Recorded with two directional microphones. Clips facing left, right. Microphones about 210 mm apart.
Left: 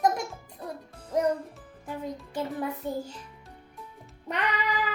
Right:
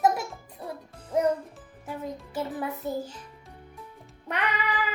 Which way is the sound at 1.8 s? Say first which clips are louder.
Even; 5° right (ahead or behind).